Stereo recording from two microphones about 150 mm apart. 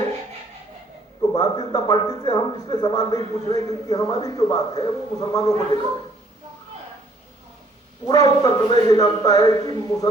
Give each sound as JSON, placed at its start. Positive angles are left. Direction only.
{"t": 1.3, "sound": "speech", "side_deg": 25}
{"t": 8.0, "sound": "speech", "side_deg": 25}